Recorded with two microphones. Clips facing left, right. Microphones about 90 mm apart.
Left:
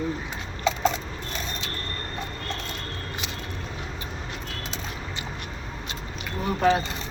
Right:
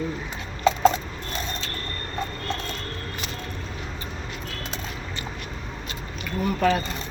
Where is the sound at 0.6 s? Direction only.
50° right (ahead or behind).